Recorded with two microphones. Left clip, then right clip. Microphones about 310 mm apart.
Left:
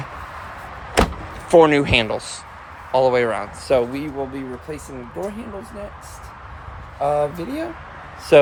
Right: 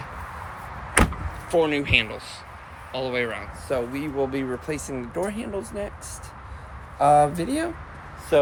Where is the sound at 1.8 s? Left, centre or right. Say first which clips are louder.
Left 3 dB; centre.